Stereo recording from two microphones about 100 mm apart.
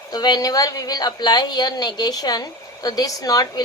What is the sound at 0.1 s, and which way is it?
A woman's voice, 45° left (ahead or behind).